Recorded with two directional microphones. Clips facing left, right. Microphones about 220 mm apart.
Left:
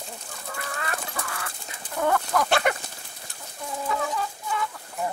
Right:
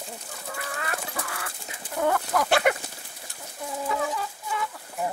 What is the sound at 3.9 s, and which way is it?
Chicken, 5° right (ahead or behind).